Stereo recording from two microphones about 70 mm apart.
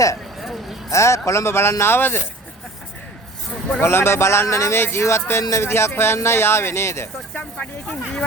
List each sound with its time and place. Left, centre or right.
0.3 s a sound: centre
0.9 s speech: left
3.8 s speech: left
5.6 s speech: left
7.3 s speech: centre